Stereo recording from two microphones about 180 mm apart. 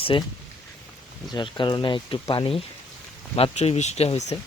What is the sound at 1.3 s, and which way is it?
Speech, 25° left (ahead or behind).